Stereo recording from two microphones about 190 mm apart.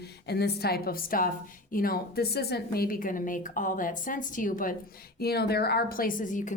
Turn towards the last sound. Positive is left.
turn(degrees=40)  # may be behind; listen again after turning